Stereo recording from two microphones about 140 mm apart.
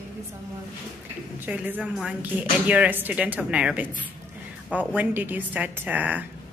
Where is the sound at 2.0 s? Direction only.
10° right (ahead or behind).